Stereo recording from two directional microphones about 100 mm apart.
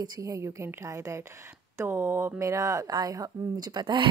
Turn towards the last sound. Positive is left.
turn(degrees=-45)  # may be behind; listen again after turning